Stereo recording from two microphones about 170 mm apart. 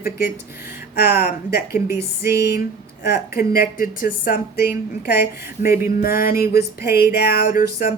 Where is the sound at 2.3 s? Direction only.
70° left (ahead or behind).